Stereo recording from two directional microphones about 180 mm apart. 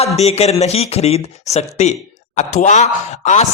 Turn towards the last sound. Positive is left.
turn(degrees=40)  # may be behind; listen again after turning